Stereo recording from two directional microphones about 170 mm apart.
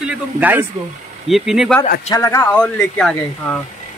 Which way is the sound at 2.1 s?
15° left (ahead or behind).